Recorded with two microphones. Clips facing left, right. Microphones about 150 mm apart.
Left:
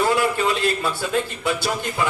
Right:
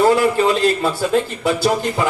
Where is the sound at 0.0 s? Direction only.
35° right (ahead or behind).